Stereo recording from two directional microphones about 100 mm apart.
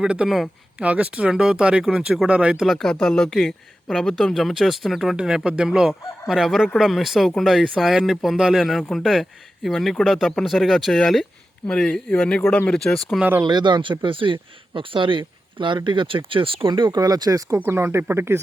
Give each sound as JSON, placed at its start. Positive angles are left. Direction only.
{"t": 0.0, "sound": "speech", "side_deg": -10}
{"t": 2.6, "sound": "speech", "side_deg": 5}
{"t": 13.4, "sound": "speech", "side_deg": -45}
{"t": 17.6, "sound": "speech", "side_deg": -20}